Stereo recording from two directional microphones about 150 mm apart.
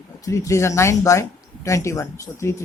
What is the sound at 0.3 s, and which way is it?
A woman's voice, 20° left (ahead or behind).